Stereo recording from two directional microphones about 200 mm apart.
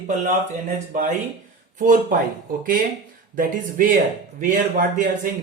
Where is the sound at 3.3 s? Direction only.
40° right (ahead or behind).